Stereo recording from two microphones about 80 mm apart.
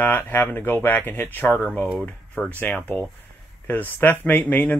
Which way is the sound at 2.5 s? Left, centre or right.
Left.